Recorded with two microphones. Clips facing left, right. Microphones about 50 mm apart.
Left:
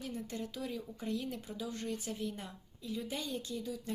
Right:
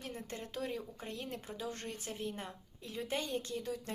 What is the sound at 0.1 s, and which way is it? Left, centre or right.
A woman's voice, right.